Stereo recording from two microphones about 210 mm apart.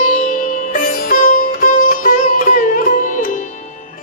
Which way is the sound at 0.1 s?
35° left (ahead or behind).